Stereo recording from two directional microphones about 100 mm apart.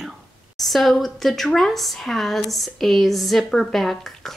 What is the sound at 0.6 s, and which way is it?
A woman's voice, centre (ahead or behind).